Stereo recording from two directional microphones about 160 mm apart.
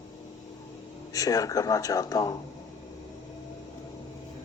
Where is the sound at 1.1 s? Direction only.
20° left (ahead or behind).